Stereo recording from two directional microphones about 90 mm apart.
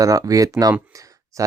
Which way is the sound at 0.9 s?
40° right (ahead or behind).